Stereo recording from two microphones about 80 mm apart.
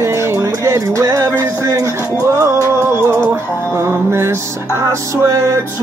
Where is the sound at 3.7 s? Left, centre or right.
Right.